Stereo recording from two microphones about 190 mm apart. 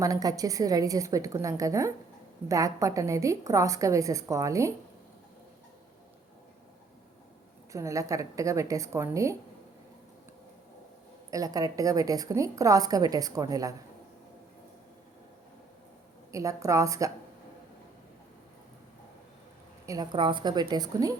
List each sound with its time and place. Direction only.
0.0 s a woman's voice: 20° right (ahead or behind)
7.7 s a woman's voice: 15° right (ahead or behind)
11.3 s a woman's voice: 20° right (ahead or behind)
16.3 s a woman's voice: 15° right (ahead or behind)
19.8 s a woman's voice: 20° right (ahead or behind)